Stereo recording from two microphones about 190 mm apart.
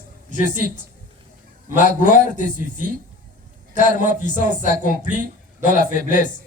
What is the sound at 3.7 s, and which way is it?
Speech, 40° left (ahead or behind).